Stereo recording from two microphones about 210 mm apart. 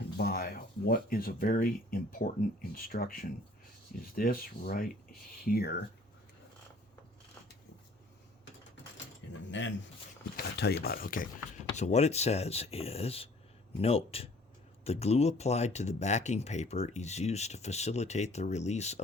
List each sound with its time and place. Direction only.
0.2 s speech: 45° left (ahead or behind)
9.5 s speech: 60° left (ahead or behind)
10.3 s speech: 50° left (ahead or behind); by 19.0 s 30° left (ahead or behind)